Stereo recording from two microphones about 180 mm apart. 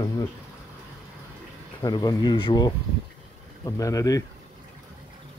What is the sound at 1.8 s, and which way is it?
Speech, 20° left (ahead or behind).